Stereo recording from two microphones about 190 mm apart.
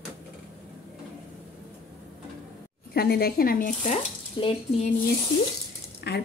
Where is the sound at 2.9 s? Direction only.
55° left (ahead or behind); by 4.9 s 35° left (ahead or behind).